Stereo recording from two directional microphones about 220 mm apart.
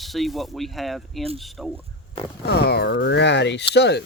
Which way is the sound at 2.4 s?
45° left (ahead or behind).